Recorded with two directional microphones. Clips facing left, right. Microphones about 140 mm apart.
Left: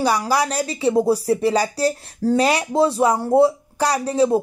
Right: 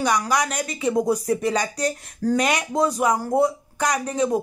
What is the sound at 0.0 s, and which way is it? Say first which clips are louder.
Speech: left 3 dB; 30° left (ahead or behind).